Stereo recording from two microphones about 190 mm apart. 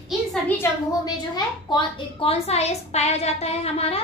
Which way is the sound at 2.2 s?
30° left (ahead or behind).